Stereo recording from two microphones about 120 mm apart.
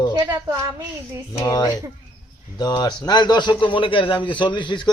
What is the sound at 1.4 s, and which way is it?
A man's voice, 35° left (ahead or behind).